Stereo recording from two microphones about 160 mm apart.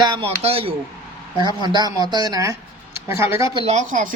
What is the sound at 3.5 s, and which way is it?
Speech, 40° right (ahead or behind).